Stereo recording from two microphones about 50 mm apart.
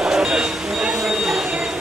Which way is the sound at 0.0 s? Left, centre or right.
Centre.